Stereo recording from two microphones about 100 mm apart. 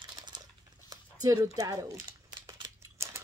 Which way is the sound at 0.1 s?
45° right (ahead or behind).